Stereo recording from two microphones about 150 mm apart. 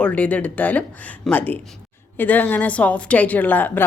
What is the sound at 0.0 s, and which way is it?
Speech, 10° left (ahead or behind).